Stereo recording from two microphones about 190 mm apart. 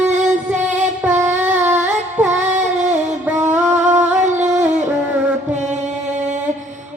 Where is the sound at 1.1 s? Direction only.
40° right (ahead or behind).